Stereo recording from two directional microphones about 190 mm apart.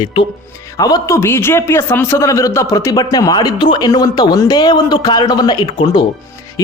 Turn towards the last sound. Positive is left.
turn(degrees=25)  # may be behind; listen again after turning